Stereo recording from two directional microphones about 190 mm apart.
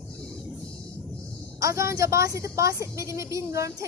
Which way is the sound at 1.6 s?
15° right (ahead or behind).